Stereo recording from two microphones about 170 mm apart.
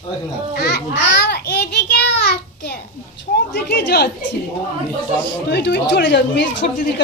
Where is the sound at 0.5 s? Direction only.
80° left.